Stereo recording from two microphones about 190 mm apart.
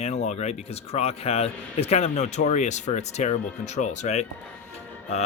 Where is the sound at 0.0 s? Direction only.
35° left (ahead or behind).